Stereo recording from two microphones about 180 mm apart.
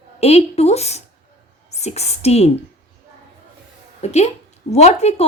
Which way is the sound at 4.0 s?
40° left (ahead or behind).